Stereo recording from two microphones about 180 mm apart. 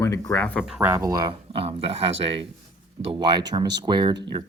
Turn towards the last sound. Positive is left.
turn(degrees=-25)  # may be behind; listen again after turning